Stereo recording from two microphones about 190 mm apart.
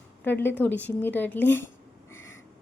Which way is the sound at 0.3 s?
10° left (ahead or behind).